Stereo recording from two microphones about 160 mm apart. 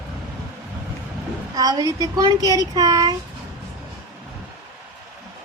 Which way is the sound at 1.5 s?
25° right (ahead or behind).